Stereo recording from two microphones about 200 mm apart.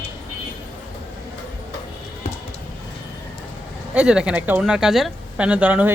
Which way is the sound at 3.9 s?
5° right (ahead or behind).